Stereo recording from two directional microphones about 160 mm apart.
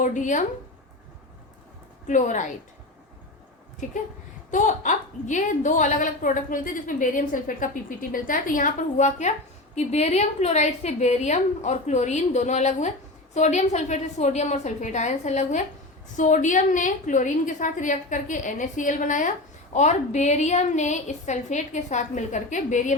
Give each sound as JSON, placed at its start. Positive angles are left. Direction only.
{"t": 0.0, "sound": "a woman's voice", "side_deg": 50}
{"t": 2.0, "sound": "a woman's voice", "side_deg": 50}
{"t": 4.5, "sound": "a woman's voice", "side_deg": 50}